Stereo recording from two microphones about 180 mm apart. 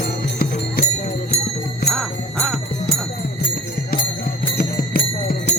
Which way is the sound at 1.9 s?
5° left (ahead or behind).